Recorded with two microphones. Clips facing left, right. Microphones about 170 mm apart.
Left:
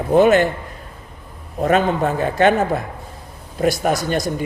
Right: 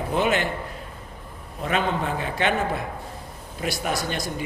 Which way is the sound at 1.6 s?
45° left (ahead or behind).